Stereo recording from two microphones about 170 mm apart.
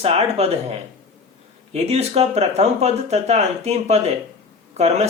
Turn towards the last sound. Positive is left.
turn(degrees=-40)  # may be behind; listen again after turning